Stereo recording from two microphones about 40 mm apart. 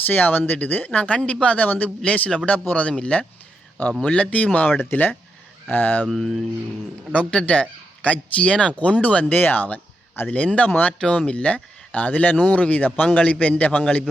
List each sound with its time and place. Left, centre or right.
0.0 s speech: left
0.9 s speech: left
1.6 s speech: left
4.3 s speech: left
4.8 s speech: left
5.7 s speech: left
6.1 s speech: centre
7.1 s speech: left
9.4 s speech: left
10.3 s speech: left
10.7 s speech: left
11.3 s speech: left